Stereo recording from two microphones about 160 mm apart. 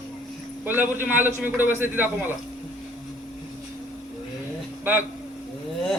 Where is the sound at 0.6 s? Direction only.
10° right (ahead or behind).